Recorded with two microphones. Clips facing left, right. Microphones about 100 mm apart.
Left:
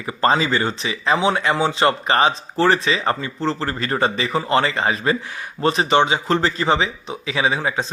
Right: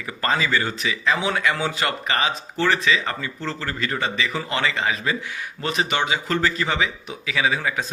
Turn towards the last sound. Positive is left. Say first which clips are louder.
# left 2 dB
turn(degrees=25)  # may be behind; listen again after turning